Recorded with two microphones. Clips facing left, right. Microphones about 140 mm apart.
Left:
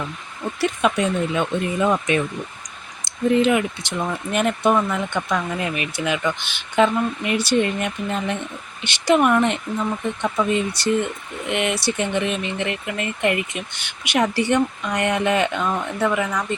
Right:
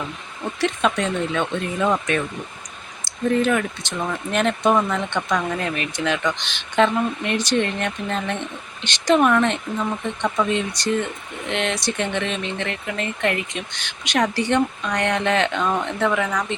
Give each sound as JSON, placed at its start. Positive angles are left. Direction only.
{"t": 0.6, "sound": "speech", "side_deg": 5}
{"t": 3.1, "sound": "a sound", "side_deg": 15}
{"t": 3.4, "sound": "speech", "side_deg": 15}